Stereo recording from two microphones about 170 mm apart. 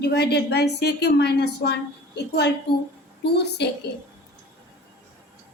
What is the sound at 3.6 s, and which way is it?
Speech, 80° left.